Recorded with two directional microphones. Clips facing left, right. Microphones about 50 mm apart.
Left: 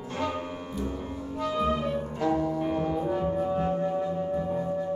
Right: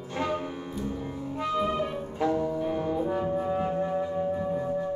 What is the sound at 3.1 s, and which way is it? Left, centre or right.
Brass instrument, centre.